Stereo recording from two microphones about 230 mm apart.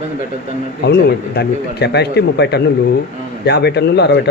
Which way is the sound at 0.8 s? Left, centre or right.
Left.